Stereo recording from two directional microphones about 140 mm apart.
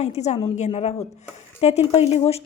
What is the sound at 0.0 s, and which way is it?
A woman's voice, 50° left (ahead or behind).